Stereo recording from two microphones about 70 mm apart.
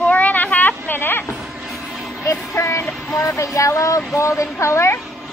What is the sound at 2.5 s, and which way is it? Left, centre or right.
Music, left.